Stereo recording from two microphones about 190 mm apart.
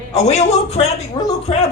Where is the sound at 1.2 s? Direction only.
20° left (ahead or behind).